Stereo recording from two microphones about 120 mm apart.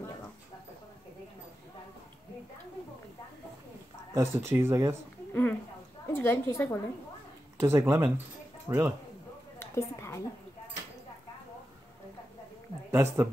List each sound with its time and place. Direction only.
4.1 s speech: 20° right (ahead or behind)
5.3 s a sound: 15° left (ahead or behind)
6.1 s a woman's voice: 20° left (ahead or behind)
7.5 s speech: 20° right (ahead or behind)
9.6 s a sound: 20° left (ahead or behind)
12.9 s speech: 20° right (ahead or behind)